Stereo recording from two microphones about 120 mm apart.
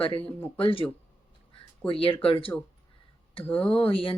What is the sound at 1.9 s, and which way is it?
Speech, 45° left (ahead or behind).